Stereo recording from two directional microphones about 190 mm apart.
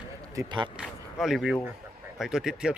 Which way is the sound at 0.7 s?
Centre (ahead or behind).